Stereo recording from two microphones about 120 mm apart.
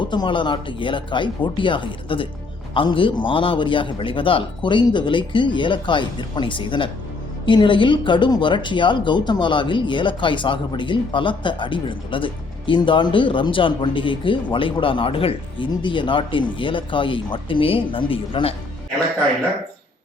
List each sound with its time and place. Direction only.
0.0 s speech: 40° left (ahead or behind)